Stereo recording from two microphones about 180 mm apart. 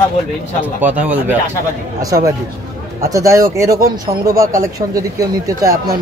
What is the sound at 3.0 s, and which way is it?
A man's voice, 15° right (ahead or behind).